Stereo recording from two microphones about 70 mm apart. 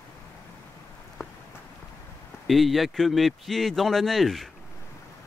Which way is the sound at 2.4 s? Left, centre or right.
Centre.